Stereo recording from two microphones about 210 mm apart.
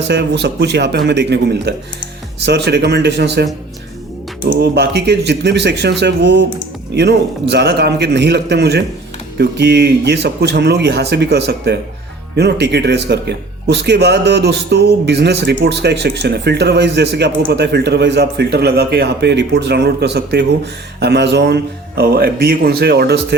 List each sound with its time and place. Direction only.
0.1 s speech: 55° right (ahead or behind)
4.4 s speech: 50° right (ahead or behind)